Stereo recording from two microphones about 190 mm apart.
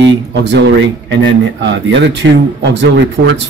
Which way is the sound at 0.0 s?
65° right (ahead or behind).